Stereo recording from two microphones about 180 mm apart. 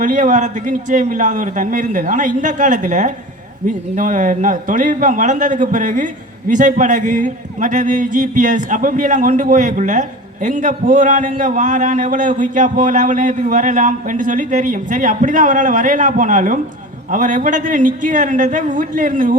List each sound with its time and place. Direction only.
0.0 s a man's voice: 45° right (ahead or behind)